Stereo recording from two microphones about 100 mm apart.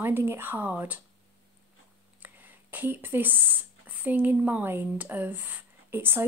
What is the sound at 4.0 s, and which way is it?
Speech, 15° right (ahead or behind).